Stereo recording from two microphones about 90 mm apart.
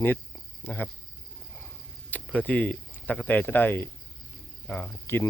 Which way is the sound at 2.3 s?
15° left (ahead or behind).